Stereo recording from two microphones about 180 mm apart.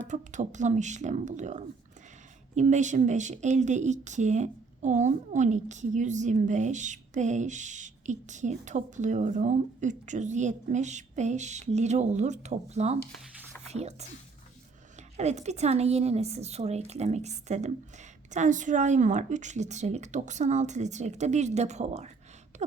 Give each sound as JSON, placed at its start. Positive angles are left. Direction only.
{"t": 0.1, "sound": "speech", "side_deg": -40}
{"t": 14.9, "sound": "speech", "side_deg": -40}
{"t": 22.5, "sound": "a sound", "side_deg": -40}